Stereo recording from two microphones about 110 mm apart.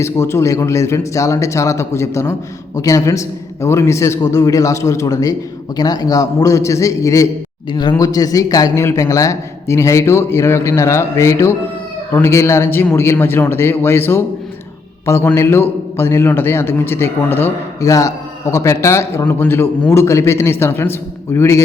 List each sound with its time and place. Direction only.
0.0 s a man's voice: 25° left (ahead or behind)
7.7 s speech: 45° left (ahead or behind)
7.9 s a man's voice: 35° left (ahead or behind)